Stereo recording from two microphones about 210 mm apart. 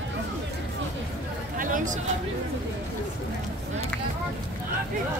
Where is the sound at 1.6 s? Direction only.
40° right (ahead or behind).